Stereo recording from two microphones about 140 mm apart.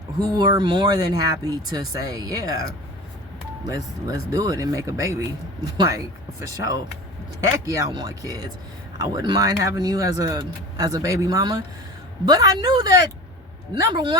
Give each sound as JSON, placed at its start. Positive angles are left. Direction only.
{"t": 0.2, "sound": "speech", "side_deg": -30}
{"t": 3.6, "sound": "speech", "side_deg": -25}
{"t": 7.7, "sound": "speech", "side_deg": -30}